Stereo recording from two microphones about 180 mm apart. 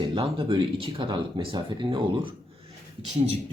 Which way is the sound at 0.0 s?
25° right (ahead or behind).